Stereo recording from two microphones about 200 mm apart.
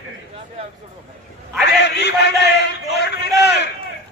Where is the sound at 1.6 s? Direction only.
60° left (ahead or behind).